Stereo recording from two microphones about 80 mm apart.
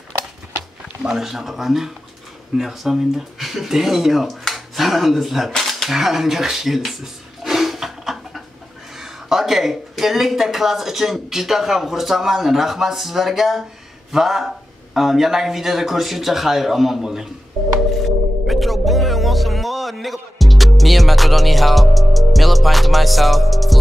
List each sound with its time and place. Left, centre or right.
1.0 s speech: centre
18.5 s music: centre